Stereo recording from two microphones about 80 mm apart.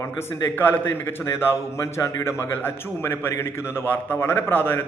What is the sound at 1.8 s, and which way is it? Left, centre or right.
A man's voice, left.